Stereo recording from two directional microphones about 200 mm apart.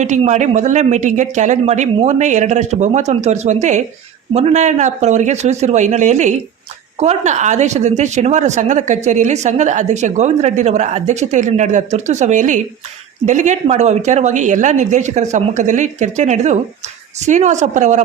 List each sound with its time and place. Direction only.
0.0 s speech: 35° right (ahead or behind)